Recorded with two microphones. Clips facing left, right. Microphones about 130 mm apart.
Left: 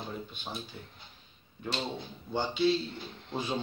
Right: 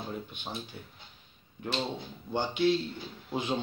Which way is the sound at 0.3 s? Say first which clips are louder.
Right 1 dB; 15° right (ahead or behind).